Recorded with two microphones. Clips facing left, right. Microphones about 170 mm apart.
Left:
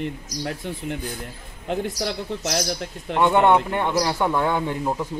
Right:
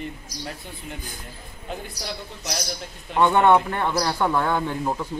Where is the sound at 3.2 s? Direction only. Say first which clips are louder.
Even; 15° left (ahead or behind).